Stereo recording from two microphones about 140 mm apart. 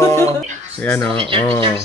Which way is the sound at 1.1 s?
40° right (ahead or behind).